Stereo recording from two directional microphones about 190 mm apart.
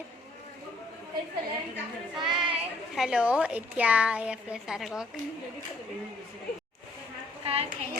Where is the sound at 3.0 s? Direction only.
5° right (ahead or behind).